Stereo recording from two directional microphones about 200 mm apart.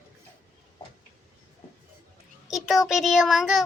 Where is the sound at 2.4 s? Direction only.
Centre (ahead or behind).